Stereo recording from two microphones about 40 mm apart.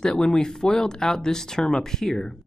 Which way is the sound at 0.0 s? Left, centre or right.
Centre.